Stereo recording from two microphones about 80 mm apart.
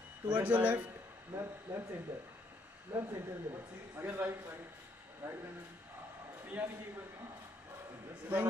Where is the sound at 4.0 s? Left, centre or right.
Centre.